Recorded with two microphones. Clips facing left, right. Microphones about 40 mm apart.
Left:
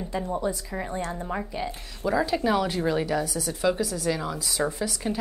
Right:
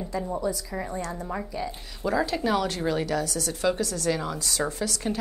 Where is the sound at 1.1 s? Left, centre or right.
Centre.